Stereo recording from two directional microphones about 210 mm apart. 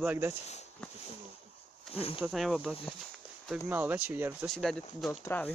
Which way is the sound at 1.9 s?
30° left (ahead or behind).